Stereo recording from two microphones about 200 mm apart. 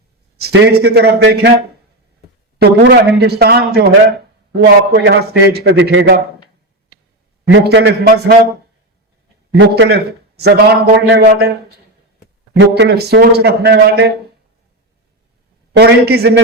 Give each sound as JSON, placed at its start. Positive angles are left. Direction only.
{"t": 0.3, "sound": "a man's voice", "side_deg": -55}
{"t": 7.4, "sound": "a man's voice", "side_deg": -55}
{"t": 9.5, "sound": "a man's voice", "side_deg": -65}
{"t": 12.5, "sound": "a man's voice", "side_deg": -60}
{"t": 15.8, "sound": "a man's voice", "side_deg": -55}